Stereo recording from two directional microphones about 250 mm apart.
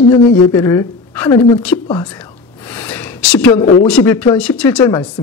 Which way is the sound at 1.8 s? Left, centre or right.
Centre.